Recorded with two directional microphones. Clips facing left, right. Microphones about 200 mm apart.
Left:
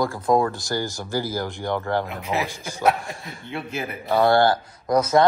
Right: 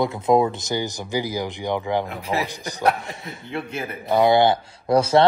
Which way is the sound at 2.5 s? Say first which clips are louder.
Right 2 dB; 15° right (ahead or behind).